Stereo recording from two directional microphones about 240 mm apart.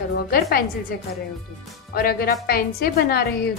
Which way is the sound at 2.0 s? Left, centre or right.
Left.